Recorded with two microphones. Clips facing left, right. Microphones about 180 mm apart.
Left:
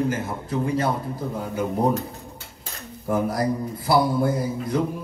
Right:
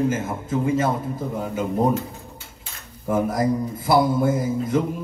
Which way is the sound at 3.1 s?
20° right (ahead or behind).